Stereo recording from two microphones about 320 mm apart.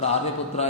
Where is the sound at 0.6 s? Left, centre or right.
Centre.